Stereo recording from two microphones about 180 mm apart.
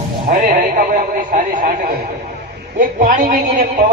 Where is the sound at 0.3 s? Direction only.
50° right (ahead or behind).